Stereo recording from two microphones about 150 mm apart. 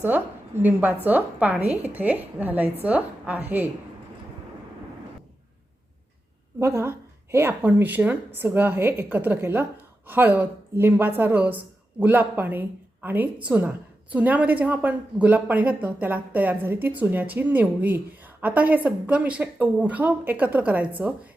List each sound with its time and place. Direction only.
0.0 s a woman's voice: 15° right (ahead or behind)
6.6 s a woman's voice: 15° right (ahead or behind)